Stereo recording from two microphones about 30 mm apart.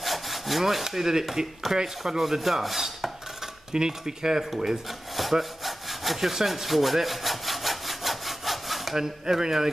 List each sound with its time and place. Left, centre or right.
0.0 s sawing: centre
0.8 s chopping: centre
3.7 s speech: right
5.3 s sawing: centre
6.1 s wood: centre
8.9 s chopping: centre